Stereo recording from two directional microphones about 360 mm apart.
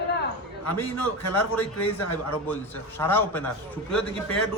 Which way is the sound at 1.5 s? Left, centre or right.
Centre.